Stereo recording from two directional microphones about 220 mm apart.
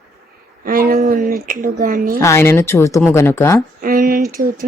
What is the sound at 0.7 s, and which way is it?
Speech, 40° right (ahead or behind).